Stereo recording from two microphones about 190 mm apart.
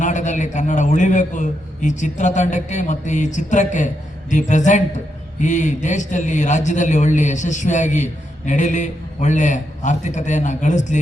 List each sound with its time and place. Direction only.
0.0 s a man's voice: 40° left (ahead or behind)